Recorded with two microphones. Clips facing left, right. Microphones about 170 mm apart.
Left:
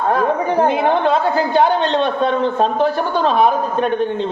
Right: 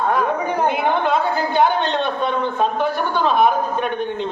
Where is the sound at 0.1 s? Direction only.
35° left (ahead or behind).